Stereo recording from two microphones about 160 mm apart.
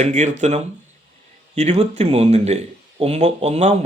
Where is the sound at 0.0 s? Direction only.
50° right (ahead or behind).